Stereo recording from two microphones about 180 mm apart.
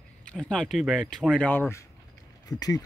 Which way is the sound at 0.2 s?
5° left (ahead or behind).